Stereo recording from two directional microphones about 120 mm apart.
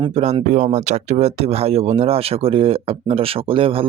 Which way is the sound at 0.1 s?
60° right (ahead or behind).